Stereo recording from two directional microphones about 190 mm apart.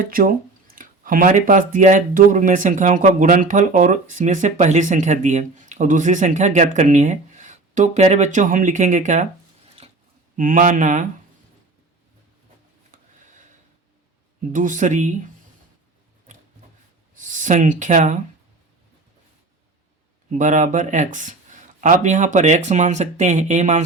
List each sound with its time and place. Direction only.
0.0 s speech: 50° right (ahead or behind)
10.3 s speech: 45° right (ahead or behind)
12.9 s a sound: 45° right (ahead or behind)
14.5 s speech: 45° right (ahead or behind)
17.2 s speech: 40° right (ahead or behind)
20.3 s speech: 40° right (ahead or behind)